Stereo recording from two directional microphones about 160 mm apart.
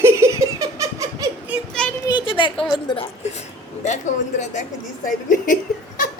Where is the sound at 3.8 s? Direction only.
50° left (ahead or behind).